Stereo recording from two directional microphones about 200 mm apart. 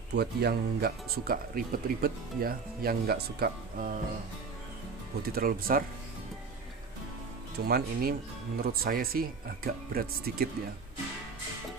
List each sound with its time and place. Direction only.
0.1 s speech: 55° right (ahead or behind)
5.2 s speech: 45° right (ahead or behind)
7.6 s speech: 50° right (ahead or behind)